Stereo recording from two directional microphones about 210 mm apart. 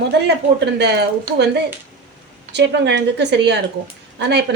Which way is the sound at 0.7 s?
50° right (ahead or behind).